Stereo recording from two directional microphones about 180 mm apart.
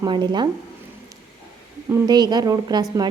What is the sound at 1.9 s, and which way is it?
Speech, 20° right (ahead or behind).